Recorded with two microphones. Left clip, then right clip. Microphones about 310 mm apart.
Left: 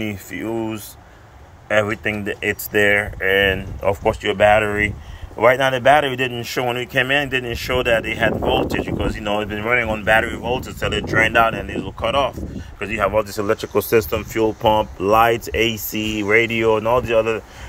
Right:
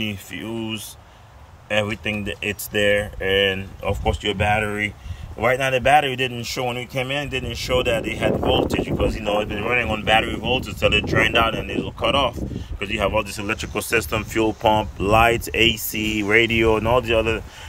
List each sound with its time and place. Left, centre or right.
0.0 s speech: centre
2.0 s a man's voice: centre